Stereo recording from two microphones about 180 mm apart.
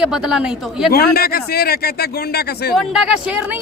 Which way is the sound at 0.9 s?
60° left (ahead or behind).